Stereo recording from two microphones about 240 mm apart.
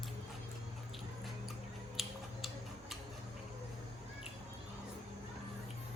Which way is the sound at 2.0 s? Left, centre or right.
Centre.